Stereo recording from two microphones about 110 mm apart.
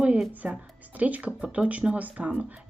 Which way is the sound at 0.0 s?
10° right (ahead or behind).